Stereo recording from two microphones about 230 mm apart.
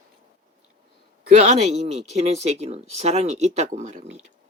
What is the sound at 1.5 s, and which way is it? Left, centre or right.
Speech, right.